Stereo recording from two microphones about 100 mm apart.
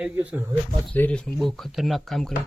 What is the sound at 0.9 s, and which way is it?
Speech, 20° left (ahead or behind).